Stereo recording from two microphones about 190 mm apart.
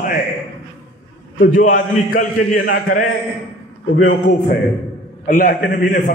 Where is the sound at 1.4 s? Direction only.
45° left (ahead or behind).